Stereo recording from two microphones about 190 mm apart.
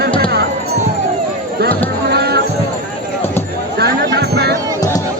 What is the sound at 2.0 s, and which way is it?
Music, 60° right (ahead or behind).